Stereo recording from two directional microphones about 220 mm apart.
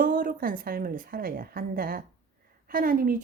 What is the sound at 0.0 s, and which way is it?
Speech, 40° right (ahead or behind).